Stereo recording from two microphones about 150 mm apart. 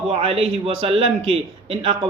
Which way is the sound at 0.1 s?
40° right (ahead or behind).